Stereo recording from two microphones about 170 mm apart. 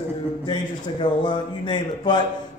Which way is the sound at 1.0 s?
25° left (ahead or behind).